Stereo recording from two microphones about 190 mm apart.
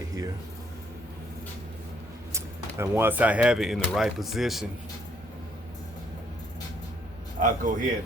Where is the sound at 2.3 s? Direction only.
15° right (ahead or behind).